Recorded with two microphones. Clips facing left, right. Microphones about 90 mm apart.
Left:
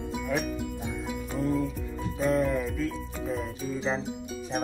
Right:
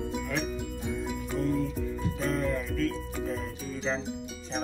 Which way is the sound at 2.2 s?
5° left (ahead or behind).